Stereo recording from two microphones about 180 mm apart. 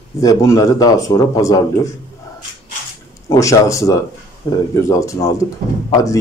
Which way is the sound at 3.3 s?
15° left (ahead or behind).